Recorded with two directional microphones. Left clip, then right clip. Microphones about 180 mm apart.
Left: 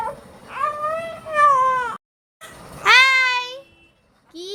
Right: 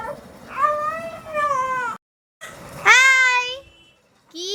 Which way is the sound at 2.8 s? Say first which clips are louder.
Even; 5° right (ahead or behind).